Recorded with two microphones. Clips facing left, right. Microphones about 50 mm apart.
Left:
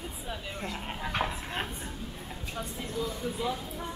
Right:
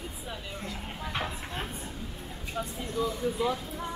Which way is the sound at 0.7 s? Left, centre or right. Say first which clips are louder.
Left 3 dB; centre.